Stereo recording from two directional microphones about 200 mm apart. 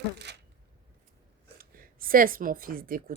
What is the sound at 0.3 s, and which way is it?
Speech, 55° right (ahead or behind).